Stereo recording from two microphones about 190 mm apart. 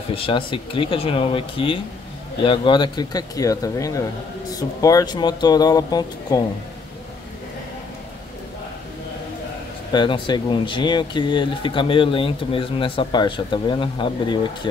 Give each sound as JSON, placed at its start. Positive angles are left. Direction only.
{"t": 0.1, "sound": "speech", "side_deg": 30}
{"t": 9.9, "sound": "speech", "side_deg": 25}